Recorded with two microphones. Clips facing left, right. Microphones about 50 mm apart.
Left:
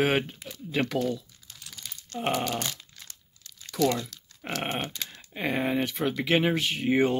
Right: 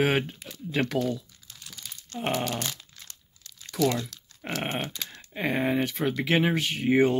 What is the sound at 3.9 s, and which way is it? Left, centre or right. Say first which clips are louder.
Speech: right 1 dB; centre.